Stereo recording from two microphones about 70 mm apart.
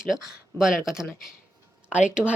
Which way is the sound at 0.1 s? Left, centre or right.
Centre.